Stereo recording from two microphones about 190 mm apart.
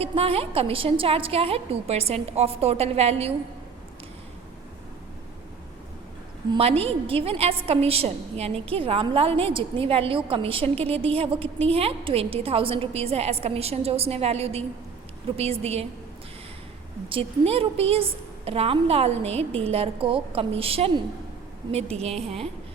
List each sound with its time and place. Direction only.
0.0 s a woman's voice: 30° right (ahead or behind)
6.5 s a woman's voice: 30° right (ahead or behind)
17.1 s a woman's voice: 30° right (ahead or behind)